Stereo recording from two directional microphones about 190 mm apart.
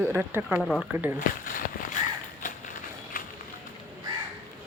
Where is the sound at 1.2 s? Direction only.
45° left (ahead or behind).